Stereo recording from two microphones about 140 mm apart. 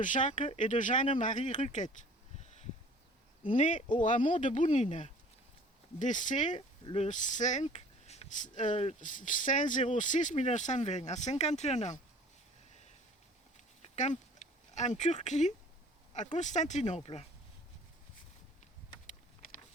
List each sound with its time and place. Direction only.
0.0 s speech: 65° left (ahead or behind)
2.4 s a sound: 55° left (ahead or behind)
3.5 s speech: 65° left (ahead or behind)
6.6 s speech: 45° left (ahead or behind)
13.8 s a sound: 55° left (ahead or behind)
16.3 s speech: 60° left (ahead or behind)